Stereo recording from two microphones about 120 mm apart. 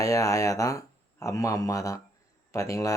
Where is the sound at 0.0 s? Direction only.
25° left (ahead or behind).